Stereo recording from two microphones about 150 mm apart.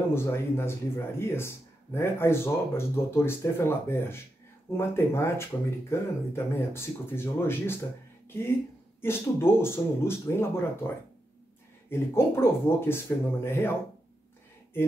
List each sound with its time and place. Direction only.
0.1 s speech: 15° left (ahead or behind)
9.0 s speech: 15° left (ahead or behind)
12.1 s speech: 15° left (ahead or behind)